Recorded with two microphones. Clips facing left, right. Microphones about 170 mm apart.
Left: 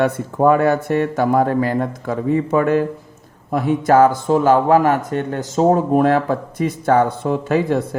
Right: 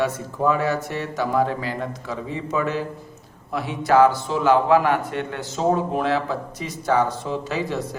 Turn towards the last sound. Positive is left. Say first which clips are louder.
# left 8 dB
turn(degrees=55)  # may be behind; listen again after turning